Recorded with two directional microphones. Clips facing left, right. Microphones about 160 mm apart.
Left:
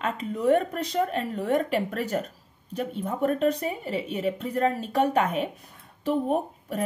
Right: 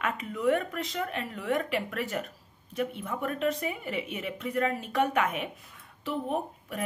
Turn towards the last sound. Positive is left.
turn(degrees=40)  # may be behind; listen again after turning